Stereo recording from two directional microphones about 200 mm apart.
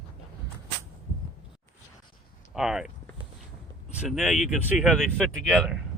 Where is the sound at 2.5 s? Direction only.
5° right (ahead or behind).